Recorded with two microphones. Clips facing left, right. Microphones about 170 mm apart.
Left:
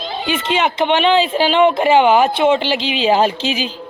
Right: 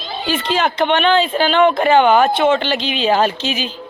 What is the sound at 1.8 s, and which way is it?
Speech, 10° left (ahead or behind).